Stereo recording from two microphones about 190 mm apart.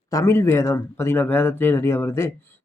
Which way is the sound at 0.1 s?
15° left (ahead or behind).